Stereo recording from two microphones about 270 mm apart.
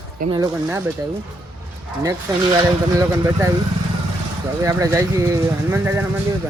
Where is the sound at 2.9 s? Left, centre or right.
Centre.